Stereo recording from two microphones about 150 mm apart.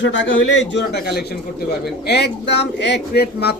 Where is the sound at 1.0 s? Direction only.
90° left.